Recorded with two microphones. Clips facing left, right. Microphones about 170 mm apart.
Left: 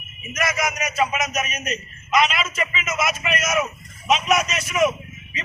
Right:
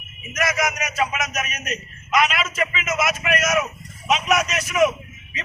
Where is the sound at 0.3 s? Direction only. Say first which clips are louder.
Right 1 dB; centre (ahead or behind).